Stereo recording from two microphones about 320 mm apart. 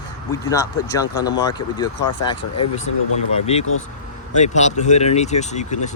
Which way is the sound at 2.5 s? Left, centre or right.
Left.